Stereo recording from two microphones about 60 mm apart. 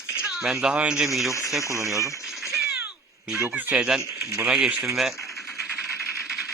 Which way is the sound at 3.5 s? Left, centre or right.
Right.